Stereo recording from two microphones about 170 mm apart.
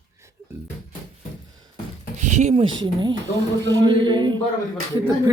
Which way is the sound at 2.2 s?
40° right (ahead or behind).